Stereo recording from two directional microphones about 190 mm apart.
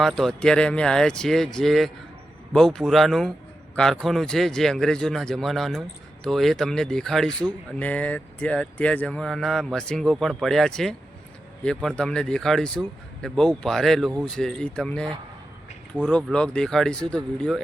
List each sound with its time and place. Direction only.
0.0 s speech: centre (ahead or behind)